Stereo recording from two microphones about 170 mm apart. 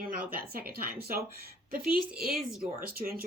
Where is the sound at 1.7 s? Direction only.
60° right (ahead or behind).